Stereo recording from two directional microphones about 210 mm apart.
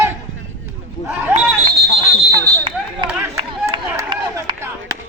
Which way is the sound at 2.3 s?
25° right (ahead or behind).